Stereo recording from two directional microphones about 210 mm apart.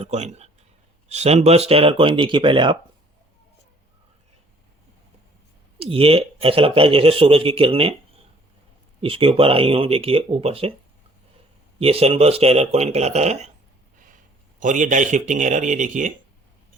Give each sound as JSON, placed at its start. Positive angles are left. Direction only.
{"t": 0.0, "sound": "speech", "side_deg": -30}
{"t": 5.8, "sound": "speech", "side_deg": -25}
{"t": 9.0, "sound": "speech", "side_deg": -25}
{"t": 11.8, "sound": "speech", "side_deg": -30}
{"t": 14.6, "sound": "speech", "side_deg": -40}